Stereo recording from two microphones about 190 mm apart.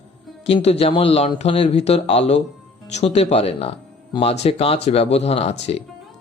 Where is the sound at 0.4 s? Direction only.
35° left (ahead or behind).